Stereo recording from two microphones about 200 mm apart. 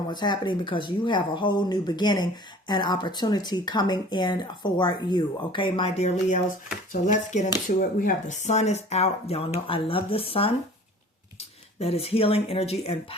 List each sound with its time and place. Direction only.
0.1 s speech: 20° left (ahead or behind)